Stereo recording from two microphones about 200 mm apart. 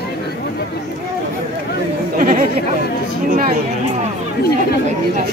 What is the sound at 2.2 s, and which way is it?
Chatter, 45° right (ahead or behind).